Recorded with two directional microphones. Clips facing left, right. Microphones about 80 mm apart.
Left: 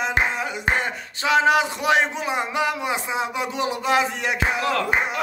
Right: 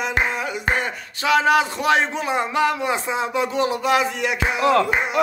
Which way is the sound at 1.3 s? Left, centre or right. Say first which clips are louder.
Right 1 dB; left.